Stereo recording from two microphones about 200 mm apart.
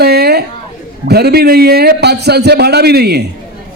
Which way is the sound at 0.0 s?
50° right (ahead or behind).